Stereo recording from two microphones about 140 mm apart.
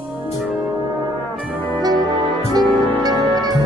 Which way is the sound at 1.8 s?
30° right (ahead or behind).